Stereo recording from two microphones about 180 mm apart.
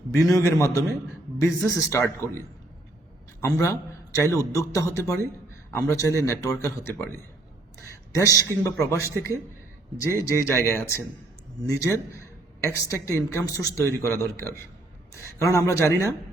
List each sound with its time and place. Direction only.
0.1 s a man's voice: 15° left (ahead or behind)
4.1 s a man's voice: 15° left (ahead or behind)